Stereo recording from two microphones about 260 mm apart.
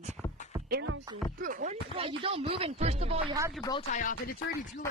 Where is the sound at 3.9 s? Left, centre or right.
Left.